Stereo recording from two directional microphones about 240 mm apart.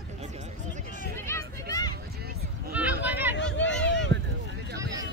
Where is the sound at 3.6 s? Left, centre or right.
Left.